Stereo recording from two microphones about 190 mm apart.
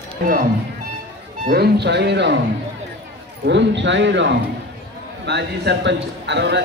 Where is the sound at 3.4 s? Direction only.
70° right (ahead or behind).